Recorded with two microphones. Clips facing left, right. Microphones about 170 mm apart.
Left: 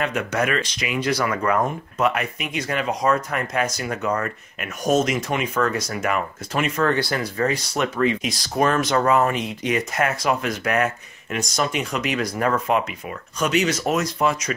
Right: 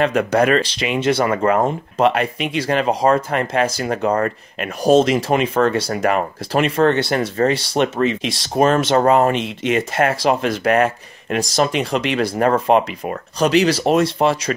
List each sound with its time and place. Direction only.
0.3 s speech: 35° right (ahead or behind)